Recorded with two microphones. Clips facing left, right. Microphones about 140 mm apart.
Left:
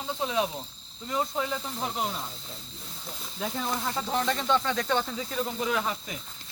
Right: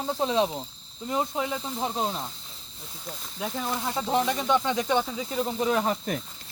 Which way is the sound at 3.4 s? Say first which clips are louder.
Right 1 dB; 5° right (ahead or behind).